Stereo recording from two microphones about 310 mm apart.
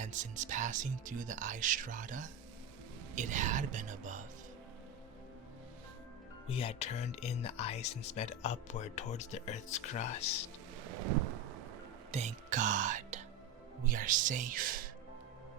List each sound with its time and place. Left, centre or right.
0.0 s speech: right
6.5 s speech: centre
12.1 s speech: right